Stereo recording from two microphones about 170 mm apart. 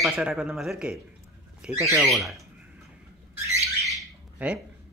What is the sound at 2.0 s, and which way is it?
Speech, centre (ahead or behind).